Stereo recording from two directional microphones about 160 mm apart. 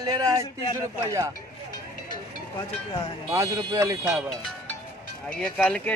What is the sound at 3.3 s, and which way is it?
Speech, 20° right (ahead or behind).